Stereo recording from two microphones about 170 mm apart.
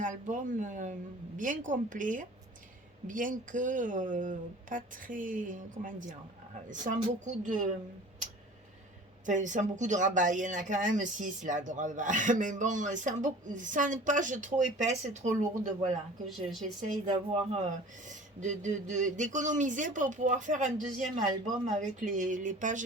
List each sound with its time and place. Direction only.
0.0 s speech: 50° right (ahead or behind)
9.2 s speech: 45° right (ahead or behind)